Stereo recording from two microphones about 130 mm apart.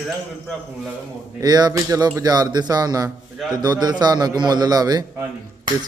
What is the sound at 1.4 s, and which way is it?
A man's voice, 30° right (ahead or behind).